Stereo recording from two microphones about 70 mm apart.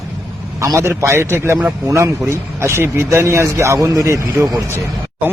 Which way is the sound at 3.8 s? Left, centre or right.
Right.